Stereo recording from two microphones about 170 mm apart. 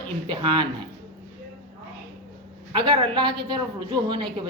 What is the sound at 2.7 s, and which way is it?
A man's voice, 30° right (ahead or behind).